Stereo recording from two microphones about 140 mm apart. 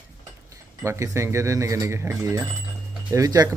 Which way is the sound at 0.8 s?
20° right (ahead or behind).